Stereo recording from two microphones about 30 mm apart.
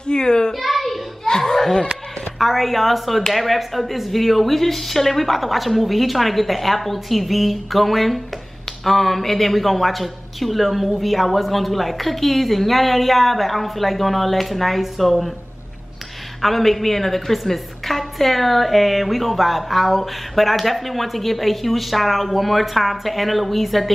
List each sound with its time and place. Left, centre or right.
0.0 s a child's voice: left
0.5 s a sound: centre
1.4 s a child's voice: centre
2.3 s a woman's voice: centre
16.3 s a woman's voice: centre